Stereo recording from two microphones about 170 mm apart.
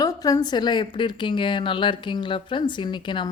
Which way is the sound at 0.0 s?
20° left (ahead or behind).